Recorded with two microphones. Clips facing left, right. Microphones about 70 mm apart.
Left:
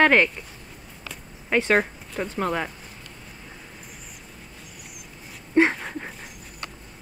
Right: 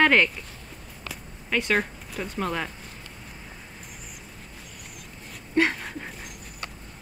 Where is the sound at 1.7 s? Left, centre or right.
Centre.